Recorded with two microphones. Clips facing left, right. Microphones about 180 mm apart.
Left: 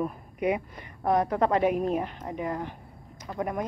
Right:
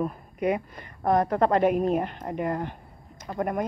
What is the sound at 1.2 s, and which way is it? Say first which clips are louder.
Speech: right 2 dB; 5° left (ahead or behind).